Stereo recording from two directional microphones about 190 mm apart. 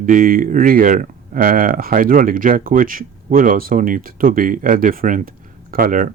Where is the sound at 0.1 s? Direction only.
50° right (ahead or behind).